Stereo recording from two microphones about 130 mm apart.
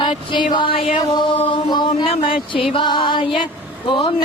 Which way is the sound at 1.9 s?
45° left (ahead or behind).